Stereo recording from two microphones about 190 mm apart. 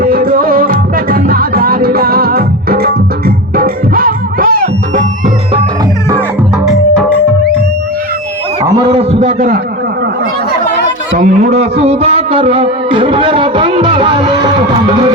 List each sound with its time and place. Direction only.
0.0 s music: 50° right (ahead or behind)
6.7 s music: 5° left (ahead or behind)
8.6 s heart sounds: 25° right (ahead or behind)
11.2 s music: 40° right (ahead or behind)